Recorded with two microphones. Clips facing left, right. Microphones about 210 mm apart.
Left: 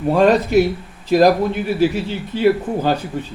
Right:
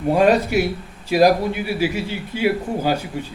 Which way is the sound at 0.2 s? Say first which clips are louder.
Left 4 dB; 10° right (ahead or behind).